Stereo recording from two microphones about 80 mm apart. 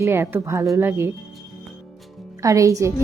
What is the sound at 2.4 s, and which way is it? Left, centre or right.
Speech, right.